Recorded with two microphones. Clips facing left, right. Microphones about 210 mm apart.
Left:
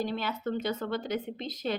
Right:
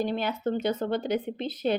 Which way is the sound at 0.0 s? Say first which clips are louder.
Right 4 dB; 55° right (ahead or behind).